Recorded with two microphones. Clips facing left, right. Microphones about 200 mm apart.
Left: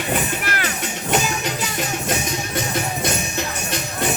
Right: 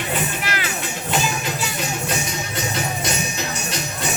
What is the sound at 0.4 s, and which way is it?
Music, 50° left (ahead or behind).